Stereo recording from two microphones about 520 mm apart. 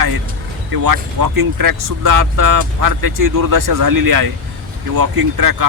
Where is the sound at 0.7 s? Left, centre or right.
Right.